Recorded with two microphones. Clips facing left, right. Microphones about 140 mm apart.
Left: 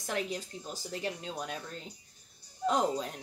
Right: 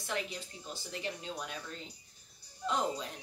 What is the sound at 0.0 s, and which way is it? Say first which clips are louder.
A woman's voice: left 4 dB; 45° left (ahead or behind).